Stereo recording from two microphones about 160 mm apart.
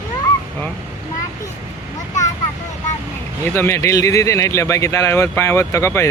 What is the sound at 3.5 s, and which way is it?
Speech, 15° left (ahead or behind).